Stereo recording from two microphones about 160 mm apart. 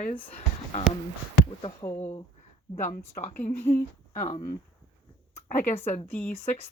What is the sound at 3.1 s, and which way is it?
Speech, 45° left (ahead or behind).